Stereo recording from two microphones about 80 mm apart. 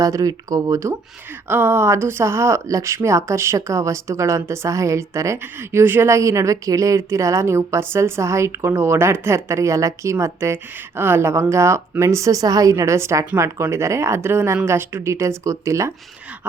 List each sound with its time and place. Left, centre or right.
0.0 s speech: right
1.5 s speech: right